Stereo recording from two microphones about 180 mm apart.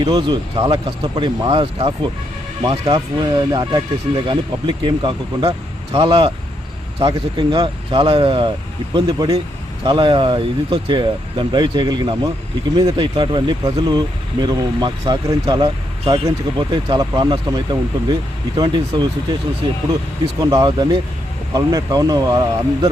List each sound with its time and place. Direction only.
0.0 s speech: 20° right (ahead or behind)
20.4 s speech: 20° right (ahead or behind)